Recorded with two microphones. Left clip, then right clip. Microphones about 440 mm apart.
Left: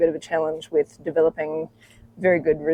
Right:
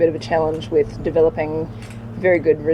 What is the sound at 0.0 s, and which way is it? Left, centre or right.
Speech, left.